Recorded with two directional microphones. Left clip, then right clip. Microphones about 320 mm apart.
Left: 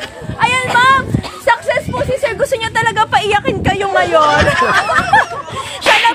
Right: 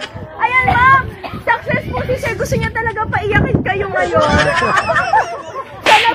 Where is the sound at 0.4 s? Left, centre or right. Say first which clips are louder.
Even; left.